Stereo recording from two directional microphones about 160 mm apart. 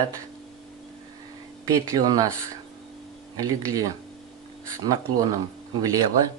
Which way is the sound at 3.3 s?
20° right (ahead or behind).